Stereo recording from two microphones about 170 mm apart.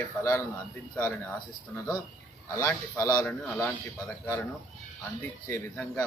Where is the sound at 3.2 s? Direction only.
10° left (ahead or behind).